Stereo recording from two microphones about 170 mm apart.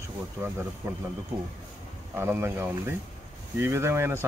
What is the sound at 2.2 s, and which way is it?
Speech, 15° right (ahead or behind).